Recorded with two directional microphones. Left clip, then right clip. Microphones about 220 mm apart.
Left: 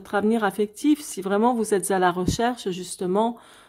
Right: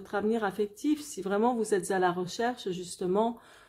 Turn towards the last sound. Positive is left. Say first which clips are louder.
# left 5 dB
turn(degrees=25)  # may be behind; listen again after turning